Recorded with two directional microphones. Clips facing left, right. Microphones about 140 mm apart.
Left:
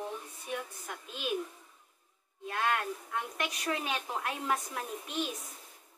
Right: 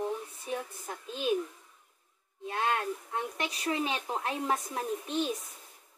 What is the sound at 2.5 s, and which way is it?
Speech, 30° right (ahead or behind).